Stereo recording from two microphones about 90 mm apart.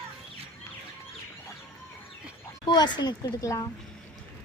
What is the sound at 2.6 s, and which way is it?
A child's voice, 55° left (ahead or behind).